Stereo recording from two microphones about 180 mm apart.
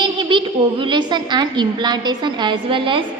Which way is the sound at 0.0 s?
25° right (ahead or behind).